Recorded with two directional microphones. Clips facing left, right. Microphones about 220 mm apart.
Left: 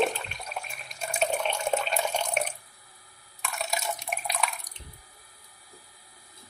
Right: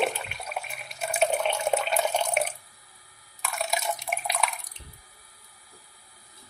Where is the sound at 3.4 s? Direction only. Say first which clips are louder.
Right 3 dB; centre (ahead or behind).